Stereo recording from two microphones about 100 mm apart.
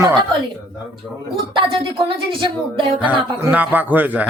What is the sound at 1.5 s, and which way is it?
Speech, 60° right (ahead or behind).